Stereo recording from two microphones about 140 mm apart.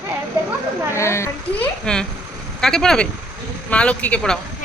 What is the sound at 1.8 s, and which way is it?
Speech, 5° left (ahead or behind).